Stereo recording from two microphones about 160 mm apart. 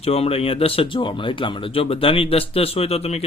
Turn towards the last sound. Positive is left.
turn(degrees=40)  # may be behind; listen again after turning